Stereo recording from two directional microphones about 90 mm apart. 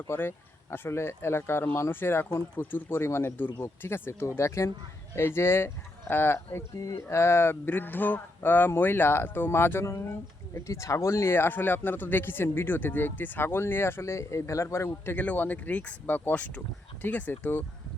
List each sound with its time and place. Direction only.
0.1 s speech: 25° left (ahead or behind)